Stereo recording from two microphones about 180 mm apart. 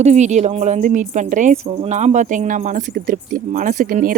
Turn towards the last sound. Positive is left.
turn(degrees=-50)  # may be behind; listen again after turning